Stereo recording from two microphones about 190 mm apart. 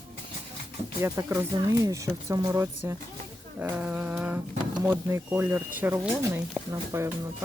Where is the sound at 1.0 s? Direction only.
15° right (ahead or behind).